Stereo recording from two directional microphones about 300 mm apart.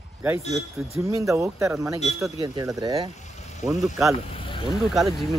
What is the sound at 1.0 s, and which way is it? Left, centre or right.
Speech, centre.